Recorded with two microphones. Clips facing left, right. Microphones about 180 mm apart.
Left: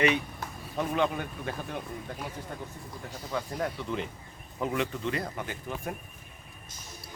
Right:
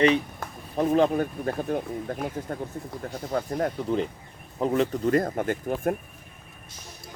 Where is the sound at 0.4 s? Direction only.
50° right (ahead or behind).